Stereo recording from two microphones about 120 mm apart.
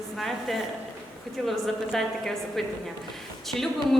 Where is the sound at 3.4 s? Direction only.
Centre (ahead or behind).